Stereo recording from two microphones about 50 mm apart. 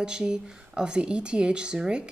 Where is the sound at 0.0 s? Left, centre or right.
Centre.